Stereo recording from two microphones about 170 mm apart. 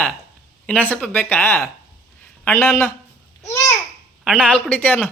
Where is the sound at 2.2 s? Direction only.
10° left (ahead or behind).